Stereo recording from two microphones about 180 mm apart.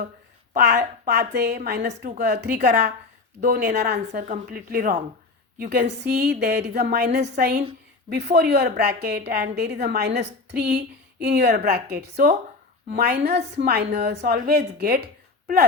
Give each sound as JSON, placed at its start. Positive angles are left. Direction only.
{"t": 0.5, "sound": "a woman's voice", "side_deg": -65}
{"t": 4.1, "sound": "a woman's voice", "side_deg": -50}